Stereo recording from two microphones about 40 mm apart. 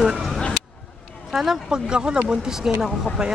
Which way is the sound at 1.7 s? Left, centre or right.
Right.